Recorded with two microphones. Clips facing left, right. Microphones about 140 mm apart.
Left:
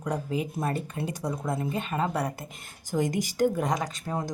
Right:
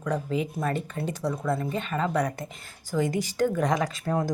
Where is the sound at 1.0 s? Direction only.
15° left (ahead or behind).